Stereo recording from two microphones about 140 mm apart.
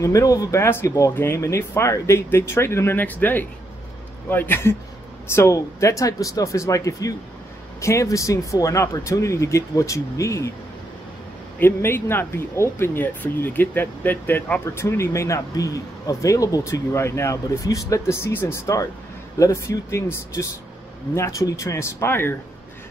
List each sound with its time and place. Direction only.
0.0 s a man's voice: 25° left (ahead or behind)
11.6 s speech: 15° left (ahead or behind)